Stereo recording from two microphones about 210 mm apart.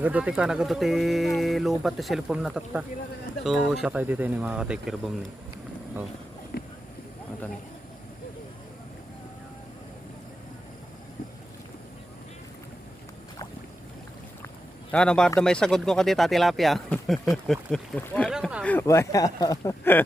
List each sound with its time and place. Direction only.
0.0 s speech: 5° right (ahead or behind)
6.5 s a sound: 45° left (ahead or behind)
14.9 s speech: 5° left (ahead or behind)